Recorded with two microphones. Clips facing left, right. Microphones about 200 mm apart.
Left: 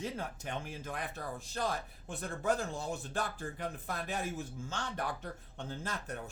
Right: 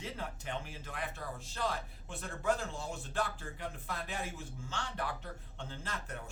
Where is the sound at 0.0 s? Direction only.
45° left (ahead or behind).